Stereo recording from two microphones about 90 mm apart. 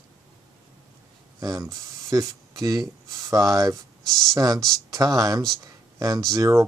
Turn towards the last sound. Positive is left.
turn(degrees=-35)  # may be behind; listen again after turning